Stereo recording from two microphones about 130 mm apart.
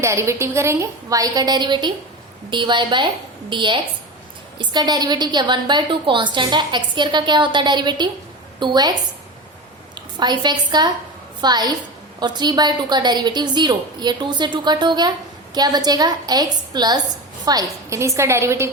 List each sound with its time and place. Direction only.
0.0 s a woman's voice: 20° right (ahead or behind)